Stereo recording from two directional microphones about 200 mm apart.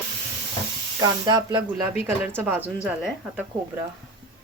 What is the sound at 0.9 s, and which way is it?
A woman's voice, 20° right (ahead or behind).